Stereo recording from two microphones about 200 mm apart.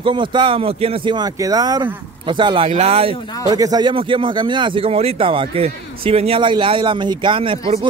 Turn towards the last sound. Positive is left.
turn(degrees=-25)  # may be behind; listen again after turning